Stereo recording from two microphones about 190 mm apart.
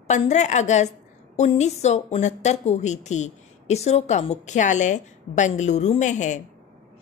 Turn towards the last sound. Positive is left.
turn(degrees=40)  # may be behind; listen again after turning